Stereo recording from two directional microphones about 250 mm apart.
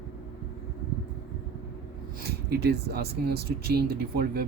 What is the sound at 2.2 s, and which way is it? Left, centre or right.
Speech, right.